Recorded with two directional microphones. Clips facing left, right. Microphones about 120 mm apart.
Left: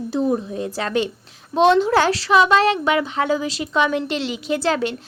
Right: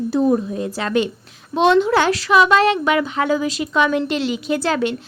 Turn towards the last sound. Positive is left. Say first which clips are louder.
# right 1 dB
turn(degrees=35)  # may be behind; listen again after turning